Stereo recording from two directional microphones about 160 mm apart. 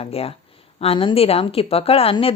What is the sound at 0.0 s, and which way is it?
A woman's voice, 40° left (ahead or behind).